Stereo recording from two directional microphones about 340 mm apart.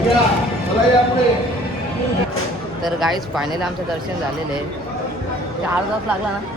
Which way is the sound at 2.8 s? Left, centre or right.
Centre.